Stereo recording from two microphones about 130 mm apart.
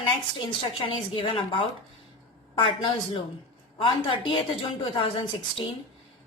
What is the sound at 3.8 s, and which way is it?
A woman's voice, 40° left (ahead or behind).